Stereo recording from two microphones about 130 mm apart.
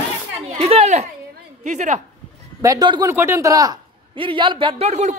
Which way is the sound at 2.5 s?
30° right (ahead or behind).